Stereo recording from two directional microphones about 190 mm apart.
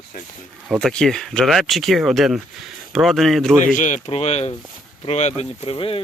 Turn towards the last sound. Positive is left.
turn(degrees=30)  # may be behind; listen again after turning